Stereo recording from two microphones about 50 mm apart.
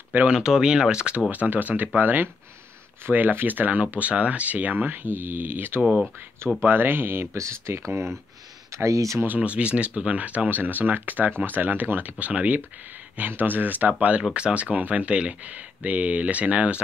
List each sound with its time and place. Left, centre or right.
0.3 s speech: centre
1.3 s speech: right
5.8 s speech: right
6.6 s speech: right
7.3 s speech: right
9.4 s speech: right
13.3 s speech: right